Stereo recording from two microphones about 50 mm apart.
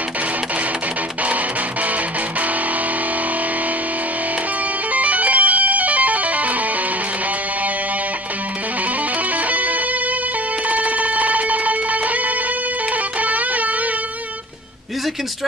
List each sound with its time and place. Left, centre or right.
4.9 s music: right
9.5 s music: right